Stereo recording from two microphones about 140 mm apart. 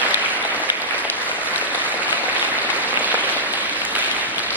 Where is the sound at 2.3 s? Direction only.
10° right (ahead or behind).